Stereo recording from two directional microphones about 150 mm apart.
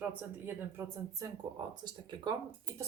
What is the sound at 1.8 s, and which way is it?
Speech, 30° right (ahead or behind).